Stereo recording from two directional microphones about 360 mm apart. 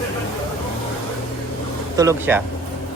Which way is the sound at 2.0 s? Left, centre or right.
Centre.